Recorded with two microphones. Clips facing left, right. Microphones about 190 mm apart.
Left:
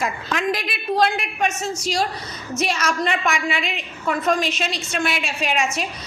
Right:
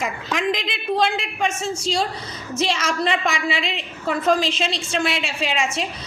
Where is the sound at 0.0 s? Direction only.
15° right (ahead or behind).